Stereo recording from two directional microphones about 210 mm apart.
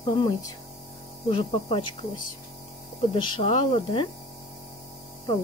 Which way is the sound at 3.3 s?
25° left (ahead or behind).